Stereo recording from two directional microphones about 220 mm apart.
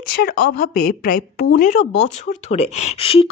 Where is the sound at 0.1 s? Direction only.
45° left (ahead or behind).